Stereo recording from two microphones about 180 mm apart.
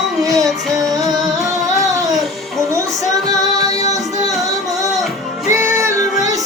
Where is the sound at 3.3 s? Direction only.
20° right (ahead or behind).